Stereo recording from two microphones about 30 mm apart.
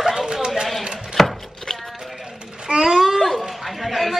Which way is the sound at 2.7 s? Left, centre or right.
Right.